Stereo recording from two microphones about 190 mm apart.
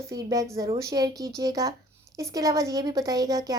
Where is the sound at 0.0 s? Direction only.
20° right (ahead or behind).